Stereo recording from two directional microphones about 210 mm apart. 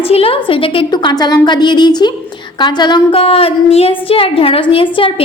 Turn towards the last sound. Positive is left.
turn(degrees=25)  # may be behind; listen again after turning